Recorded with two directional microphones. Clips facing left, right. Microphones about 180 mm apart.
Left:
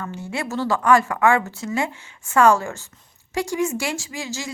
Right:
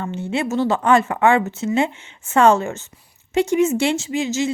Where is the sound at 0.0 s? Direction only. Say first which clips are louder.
Right 6 dB; 25° right (ahead or behind).